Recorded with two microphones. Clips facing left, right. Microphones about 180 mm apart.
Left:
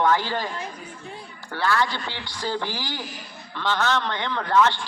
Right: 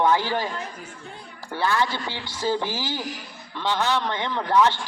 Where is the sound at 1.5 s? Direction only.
15° right (ahead or behind).